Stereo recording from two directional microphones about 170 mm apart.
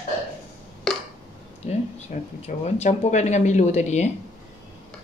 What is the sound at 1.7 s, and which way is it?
Speech, 40° left (ahead or behind).